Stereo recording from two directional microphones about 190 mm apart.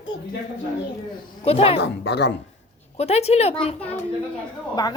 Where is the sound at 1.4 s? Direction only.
30° left (ahead or behind).